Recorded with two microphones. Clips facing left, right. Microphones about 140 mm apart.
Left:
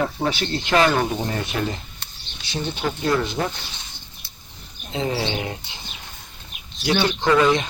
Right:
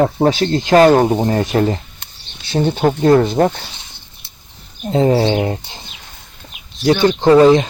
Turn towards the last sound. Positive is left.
turn(degrees=-35)  # may be behind; listen again after turning